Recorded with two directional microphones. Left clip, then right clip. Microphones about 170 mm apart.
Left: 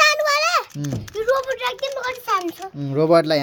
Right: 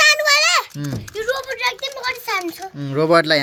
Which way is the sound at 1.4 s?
25° left (ahead or behind).